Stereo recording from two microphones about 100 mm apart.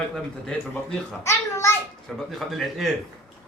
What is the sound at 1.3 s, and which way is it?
Speech, 30° left (ahead or behind).